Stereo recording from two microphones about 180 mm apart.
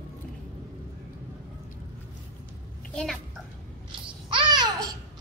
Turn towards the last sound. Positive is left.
turn(degrees=-25)  # may be behind; listen again after turning